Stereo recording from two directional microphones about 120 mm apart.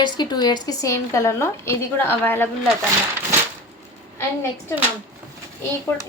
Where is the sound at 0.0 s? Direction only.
35° left (ahead or behind); by 2.5 s 15° left (ahead or behind).